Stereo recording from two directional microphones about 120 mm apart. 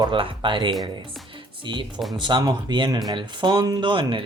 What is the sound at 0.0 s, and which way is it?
Speech, 45° right (ahead or behind).